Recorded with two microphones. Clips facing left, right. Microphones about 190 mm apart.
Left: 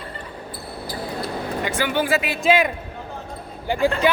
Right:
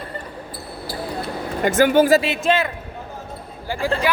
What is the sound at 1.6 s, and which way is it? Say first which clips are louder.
Speech: right 10 dB; 45° right (ahead or behind).